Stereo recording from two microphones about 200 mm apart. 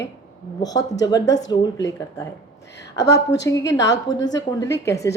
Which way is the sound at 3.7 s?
65° left (ahead or behind).